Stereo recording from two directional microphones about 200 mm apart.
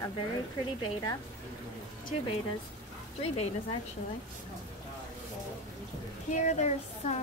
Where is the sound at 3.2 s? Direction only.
30° left (ahead or behind).